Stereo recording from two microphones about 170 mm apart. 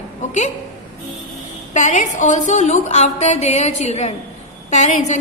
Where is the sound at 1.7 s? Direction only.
45° left (ahead or behind).